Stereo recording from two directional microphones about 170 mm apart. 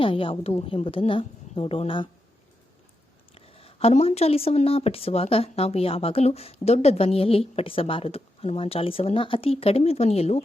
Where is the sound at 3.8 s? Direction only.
35° left (ahead or behind).